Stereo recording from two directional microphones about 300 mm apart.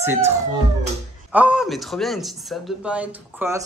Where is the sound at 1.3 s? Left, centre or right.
Centre.